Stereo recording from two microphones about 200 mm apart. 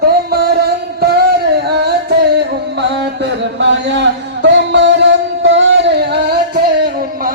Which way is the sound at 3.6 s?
60° right (ahead or behind).